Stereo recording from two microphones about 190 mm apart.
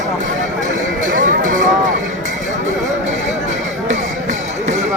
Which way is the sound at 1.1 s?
45° right (ahead or behind).